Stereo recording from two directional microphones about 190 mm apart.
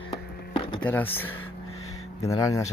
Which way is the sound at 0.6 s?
25° left (ahead or behind).